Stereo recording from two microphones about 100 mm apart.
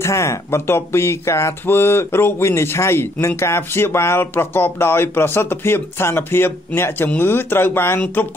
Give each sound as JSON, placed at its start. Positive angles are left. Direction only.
{"t": 0.0, "sound": "speech", "side_deg": 30}